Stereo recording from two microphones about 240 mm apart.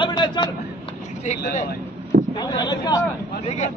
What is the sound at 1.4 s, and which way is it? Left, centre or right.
Speech, left.